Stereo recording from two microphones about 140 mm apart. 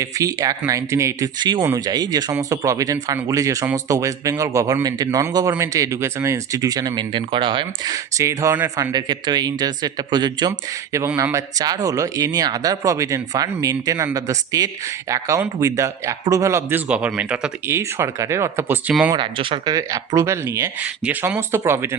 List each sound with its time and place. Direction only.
0.0 s speech: 25° right (ahead or behind)
1.4 s speech: 35° right (ahead or behind)
7.9 s speech: 25° right (ahead or behind)
11.2 s speech: 20° right (ahead or behind)
17.7 s speech: 20° right (ahead or behind)
19.1 s speech: 35° right (ahead or behind)
19.7 s speech: 25° right (ahead or behind)